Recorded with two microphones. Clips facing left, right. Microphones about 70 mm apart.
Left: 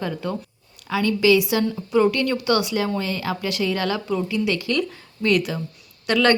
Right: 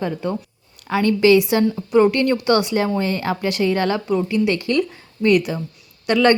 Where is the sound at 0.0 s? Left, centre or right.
Right.